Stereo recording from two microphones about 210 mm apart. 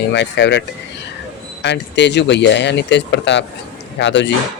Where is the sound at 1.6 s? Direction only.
55° left (ahead or behind).